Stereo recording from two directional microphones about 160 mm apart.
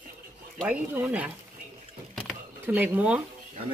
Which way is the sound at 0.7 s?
10° right (ahead or behind).